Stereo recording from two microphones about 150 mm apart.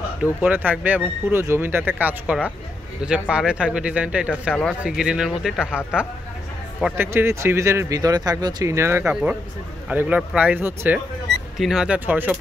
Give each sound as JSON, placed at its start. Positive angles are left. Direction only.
{"t": 0.2, "sound": "speech", "side_deg": -10}
{"t": 6.8, "sound": "speech", "side_deg": -15}